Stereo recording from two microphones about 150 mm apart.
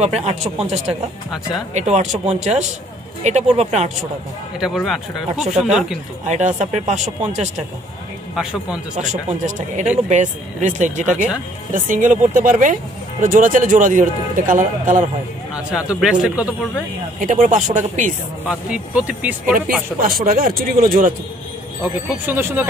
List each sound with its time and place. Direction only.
0.0 s speech: 45° right (ahead or behind)
1.7 s speech: 50° right (ahead or behind)
4.6 s speech: centre (ahead or behind)
5.3 s speech: 50° right (ahead or behind)
5.6 s speech: 5° right (ahead or behind)
6.2 s speech: 55° right (ahead or behind)
8.4 s a man's voice: 5° right (ahead or behind)
9.0 s speech: 55° right (ahead or behind)
15.5 s a man's voice: 5° right (ahead or behind)
17.2 s speech: 55° right (ahead or behind)
18.5 s a man's voice: 5° right (ahead or behind)
20.0 s speech: 75° right (ahead or behind)
21.8 s a man's voice: 15° right (ahead or behind)